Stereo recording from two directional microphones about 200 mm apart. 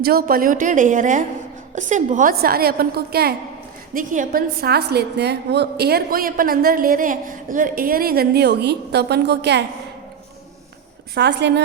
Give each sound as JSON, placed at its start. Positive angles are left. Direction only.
{"t": 0.0, "sound": "a woman's voice", "side_deg": -50}
{"t": 11.1, "sound": "a woman's voice", "side_deg": -55}